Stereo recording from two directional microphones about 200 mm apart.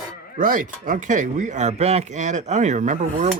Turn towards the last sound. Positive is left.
turn(degrees=-35)  # may be behind; listen again after turning